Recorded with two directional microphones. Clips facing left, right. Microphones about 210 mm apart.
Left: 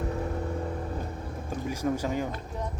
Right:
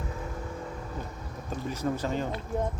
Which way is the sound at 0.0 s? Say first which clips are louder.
Left 6 dB; 35° left (ahead or behind).